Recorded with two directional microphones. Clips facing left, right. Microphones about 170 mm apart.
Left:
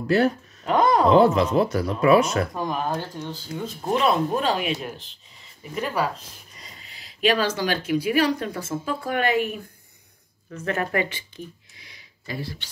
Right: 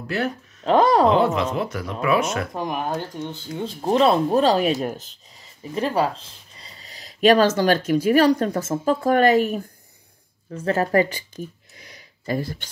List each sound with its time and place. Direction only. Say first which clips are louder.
0.0 s speech: left 5 dB; 35° left (ahead or behind)
0.7 s speech: right 3 dB; 30° right (ahead or behind)
1.1 s speech: left 3 dB; 35° left (ahead or behind)
2.5 s speech: right 1 dB; 15° right (ahead or behind); by 5.2 s 45° right (ahead or behind)
5.6 s speech: right 4 dB; 30° right (ahead or behind)
10.5 s speech: right 6 dB; 30° right (ahead or behind); by 12.6 s 45° right (ahead or behind)